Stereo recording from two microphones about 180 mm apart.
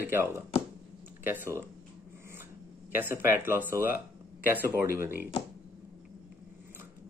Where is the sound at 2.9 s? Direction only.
10° right (ahead or behind).